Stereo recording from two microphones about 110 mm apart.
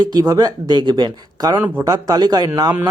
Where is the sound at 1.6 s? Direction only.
25° right (ahead or behind).